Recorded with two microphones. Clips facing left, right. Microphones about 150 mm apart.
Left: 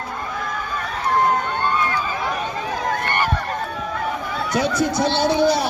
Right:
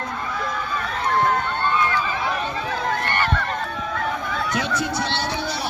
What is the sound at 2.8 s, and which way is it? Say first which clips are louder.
Run: left 2 dB; 10° left (ahead or behind).